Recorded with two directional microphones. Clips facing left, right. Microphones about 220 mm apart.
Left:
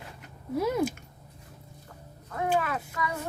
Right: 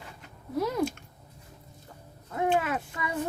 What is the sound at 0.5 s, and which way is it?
Speech, 10° left (ahead or behind).